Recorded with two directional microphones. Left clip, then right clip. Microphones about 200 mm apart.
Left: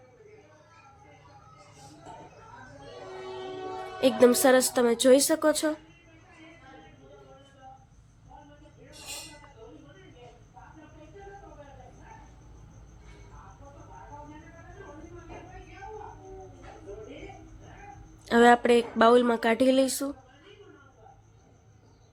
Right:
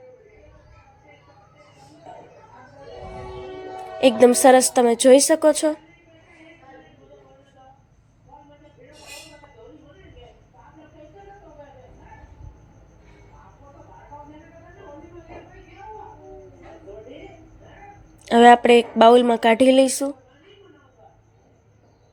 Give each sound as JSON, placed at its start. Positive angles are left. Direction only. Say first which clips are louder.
{"t": 4.0, "sound": "a woman's voice", "louder": "right 7 dB", "side_deg": -15}
{"t": 18.3, "sound": "speech", "louder": "right 8 dB", "side_deg": -15}